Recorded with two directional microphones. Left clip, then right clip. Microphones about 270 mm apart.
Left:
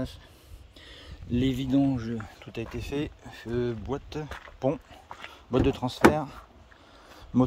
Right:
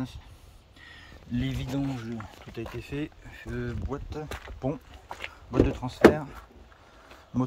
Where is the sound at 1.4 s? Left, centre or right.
Centre.